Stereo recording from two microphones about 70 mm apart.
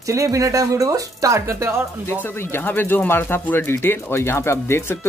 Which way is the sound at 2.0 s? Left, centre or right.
Left.